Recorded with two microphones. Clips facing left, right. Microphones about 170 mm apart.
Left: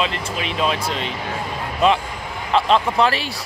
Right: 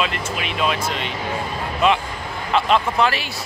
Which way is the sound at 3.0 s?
30° left (ahead or behind).